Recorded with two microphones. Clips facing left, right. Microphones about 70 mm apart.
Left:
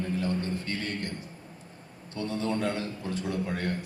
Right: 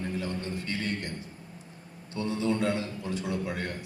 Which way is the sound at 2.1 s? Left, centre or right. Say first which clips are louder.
Right 2 dB; left.